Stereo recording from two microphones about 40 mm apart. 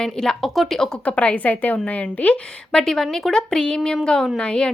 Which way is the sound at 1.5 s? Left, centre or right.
Left.